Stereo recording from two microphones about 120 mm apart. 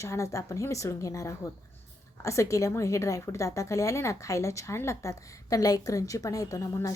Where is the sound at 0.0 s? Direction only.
25° left (ahead or behind).